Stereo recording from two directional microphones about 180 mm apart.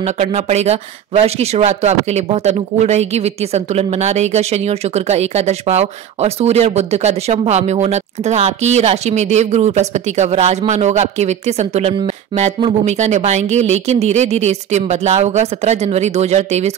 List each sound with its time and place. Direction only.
0.0 s speech: 35° right (ahead or behind)